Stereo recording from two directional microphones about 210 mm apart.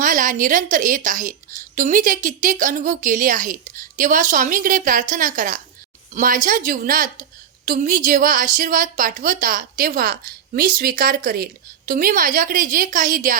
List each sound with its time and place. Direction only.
0.0 s a woman's voice: 40° right (ahead or behind)